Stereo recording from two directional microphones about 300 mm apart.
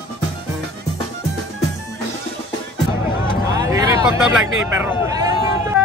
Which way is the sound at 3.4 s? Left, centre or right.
Centre.